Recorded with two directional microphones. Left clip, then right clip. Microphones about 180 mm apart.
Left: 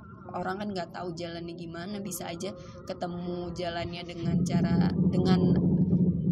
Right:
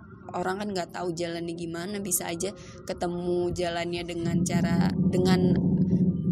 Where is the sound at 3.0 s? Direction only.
55° right (ahead or behind).